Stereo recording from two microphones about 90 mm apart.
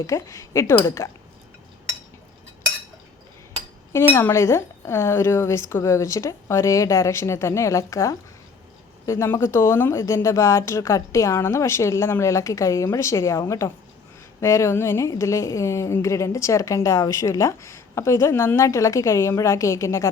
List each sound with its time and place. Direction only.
0.0 s a woman's voice: 35° left (ahead or behind)
3.9 s a woman's voice: 30° left (ahead or behind)